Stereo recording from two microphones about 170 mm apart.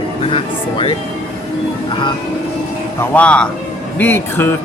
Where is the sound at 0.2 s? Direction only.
30° left (ahead or behind).